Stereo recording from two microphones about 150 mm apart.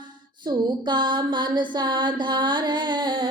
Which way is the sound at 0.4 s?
30° right (ahead or behind).